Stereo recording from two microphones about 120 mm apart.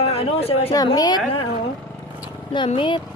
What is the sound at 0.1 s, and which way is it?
Speech, 55° left (ahead or behind).